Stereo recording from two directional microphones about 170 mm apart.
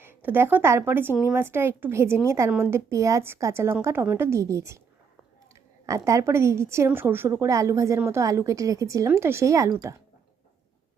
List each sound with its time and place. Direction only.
0.0 s a woman's voice: 10° right (ahead or behind)
5.8 s a woman's voice: 20° right (ahead or behind)